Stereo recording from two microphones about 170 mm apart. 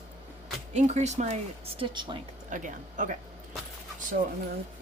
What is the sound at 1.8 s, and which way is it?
Speech, 30° right (ahead or behind).